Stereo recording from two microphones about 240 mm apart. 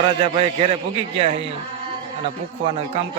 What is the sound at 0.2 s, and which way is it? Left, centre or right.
A man's voice, right.